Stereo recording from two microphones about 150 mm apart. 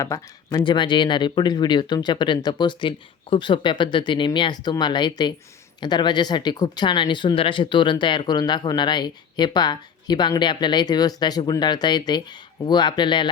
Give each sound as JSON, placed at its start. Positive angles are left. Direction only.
{"t": 0.0, "sound": "speech", "side_deg": 20}
{"t": 0.6, "sound": "speech", "side_deg": 30}